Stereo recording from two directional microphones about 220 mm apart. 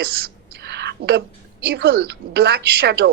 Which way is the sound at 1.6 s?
45° right (ahead or behind).